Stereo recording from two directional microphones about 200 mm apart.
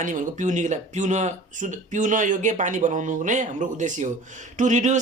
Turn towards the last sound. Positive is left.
turn(degrees=-40)  # may be behind; listen again after turning